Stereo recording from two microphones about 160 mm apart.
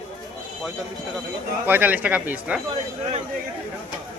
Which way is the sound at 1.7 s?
10° right (ahead or behind).